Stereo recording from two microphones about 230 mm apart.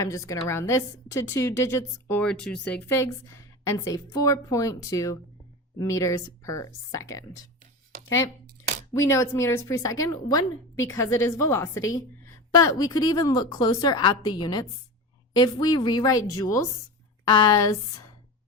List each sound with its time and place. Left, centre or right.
0.0 s speech: centre
8.0 s speech: left
8.9 s speech: centre